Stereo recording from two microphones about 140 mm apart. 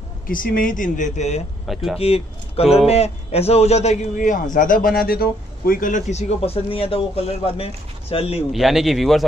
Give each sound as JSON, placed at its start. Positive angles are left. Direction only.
{"t": 0.3, "sound": "speech", "side_deg": 80}
{"t": 1.7, "sound": "a man's voice", "side_deg": 0}
{"t": 2.0, "sound": "a man's voice", "side_deg": 45}
{"t": 4.6, "sound": "a man's voice", "side_deg": 80}
{"t": 8.5, "sound": "a man's voice", "side_deg": 0}